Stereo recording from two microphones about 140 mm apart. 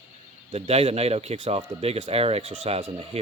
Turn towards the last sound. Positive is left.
turn(degrees=-45)  # may be behind; listen again after turning